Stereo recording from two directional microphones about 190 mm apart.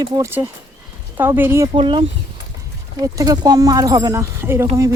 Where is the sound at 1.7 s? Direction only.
30° right (ahead or behind).